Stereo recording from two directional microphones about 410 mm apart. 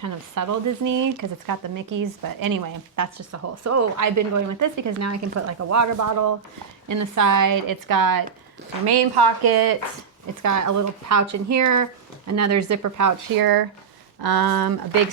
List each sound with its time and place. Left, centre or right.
0.0 s speech: right
8.9 s speech: right
10.4 s speech: right